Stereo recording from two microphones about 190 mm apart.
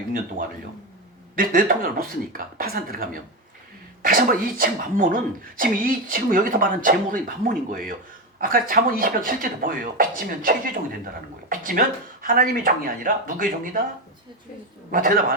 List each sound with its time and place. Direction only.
0.4 s speech: 45° right (ahead or behind)
14.9 s speech: 45° right (ahead or behind)